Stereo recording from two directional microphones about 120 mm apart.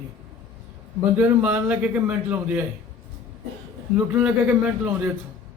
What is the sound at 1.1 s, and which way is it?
A man's voice, 15° right (ahead or behind).